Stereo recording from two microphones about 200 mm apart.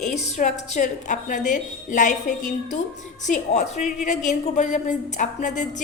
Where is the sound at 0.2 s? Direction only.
35° left (ahead or behind).